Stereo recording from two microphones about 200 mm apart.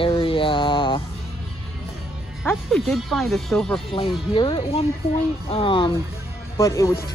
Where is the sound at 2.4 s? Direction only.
Centre (ahead or behind).